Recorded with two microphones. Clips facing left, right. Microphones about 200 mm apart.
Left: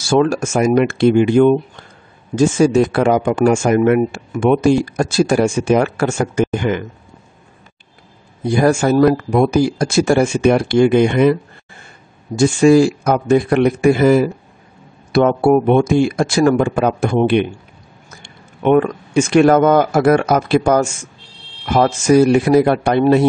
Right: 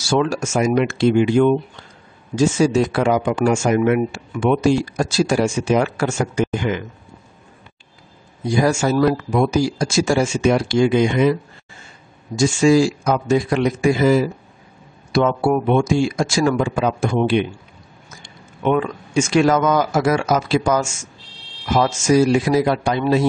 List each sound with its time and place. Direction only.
0.0 s speech: 55° left (ahead or behind)
8.4 s speech: 60° left (ahead or behind)